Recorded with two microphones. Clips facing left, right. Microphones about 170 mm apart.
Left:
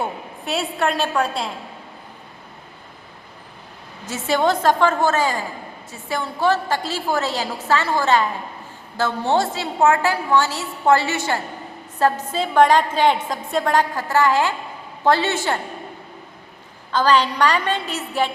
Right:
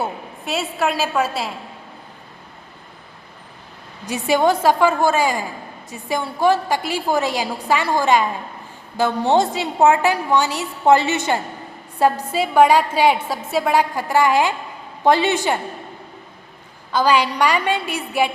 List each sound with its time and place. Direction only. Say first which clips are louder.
0.0 s a woman's voice: right 1 dB; centre (ahead or behind)
4.0 s a woman's voice: right 2 dB; 15° right (ahead or behind)
16.9 s a woman's voice: even; 10° right (ahead or behind)